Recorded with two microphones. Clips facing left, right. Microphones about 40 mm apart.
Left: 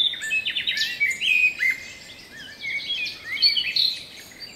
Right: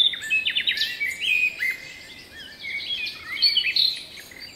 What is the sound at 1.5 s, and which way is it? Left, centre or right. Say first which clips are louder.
Bird vocalization: left 3 dB; left.